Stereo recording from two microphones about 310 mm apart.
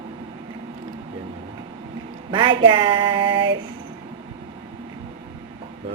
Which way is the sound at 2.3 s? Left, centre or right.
Centre.